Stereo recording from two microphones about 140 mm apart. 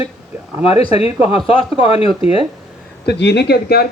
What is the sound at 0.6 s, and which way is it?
Speech, 45° left (ahead or behind).